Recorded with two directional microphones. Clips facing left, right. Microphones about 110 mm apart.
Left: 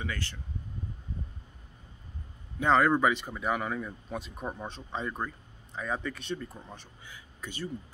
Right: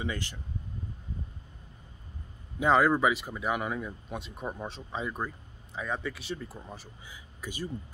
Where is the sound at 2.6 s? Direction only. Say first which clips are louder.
Even; 5° right (ahead or behind).